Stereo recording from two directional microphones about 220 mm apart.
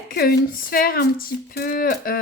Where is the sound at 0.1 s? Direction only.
45° left (ahead or behind).